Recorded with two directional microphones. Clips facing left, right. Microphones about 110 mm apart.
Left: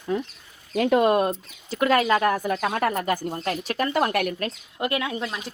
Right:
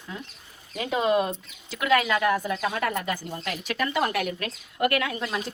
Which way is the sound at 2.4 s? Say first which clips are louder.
Left 3 dB; 55° left (ahead or behind).